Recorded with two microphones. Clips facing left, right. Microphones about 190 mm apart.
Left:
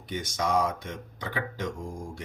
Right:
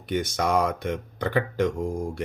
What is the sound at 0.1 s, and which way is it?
Speech, 60° right (ahead or behind).